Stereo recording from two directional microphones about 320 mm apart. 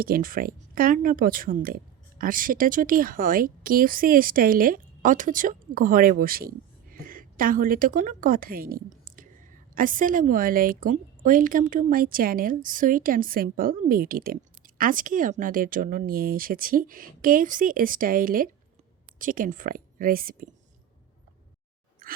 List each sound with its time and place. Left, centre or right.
0.0 s a woman's voice: right